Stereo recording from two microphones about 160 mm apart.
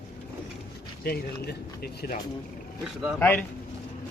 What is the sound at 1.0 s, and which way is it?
Speech, 75° left (ahead or behind).